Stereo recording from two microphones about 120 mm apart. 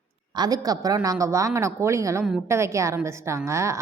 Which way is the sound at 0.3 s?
35° right (ahead or behind).